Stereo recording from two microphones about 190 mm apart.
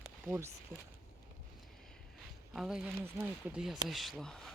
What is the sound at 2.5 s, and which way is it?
Speech, centre (ahead or behind).